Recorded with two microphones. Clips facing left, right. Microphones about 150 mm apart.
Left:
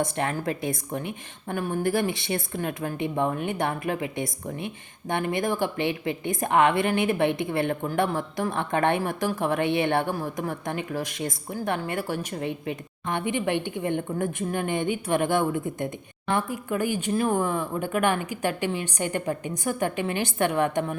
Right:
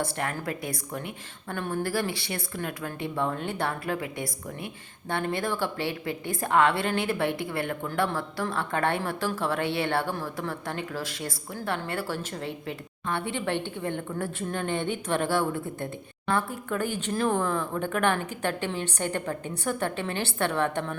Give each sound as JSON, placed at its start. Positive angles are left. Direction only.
{"t": 0.0, "sound": "a woman's voice", "side_deg": 20}